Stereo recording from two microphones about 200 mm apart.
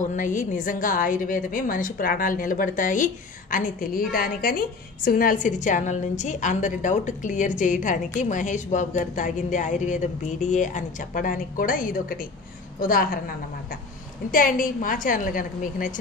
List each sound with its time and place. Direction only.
0.1 s a woman's voice: 40° left (ahead or behind)
14.3 s a woman's voice: 45° left (ahead or behind)